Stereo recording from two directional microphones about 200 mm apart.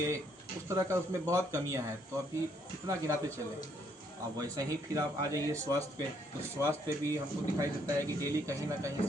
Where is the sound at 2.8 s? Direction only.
15° right (ahead or behind).